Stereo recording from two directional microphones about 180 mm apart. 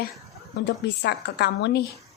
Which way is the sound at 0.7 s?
70° left (ahead or behind).